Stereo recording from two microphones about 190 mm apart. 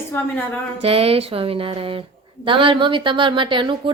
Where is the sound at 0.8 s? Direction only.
30° right (ahead or behind).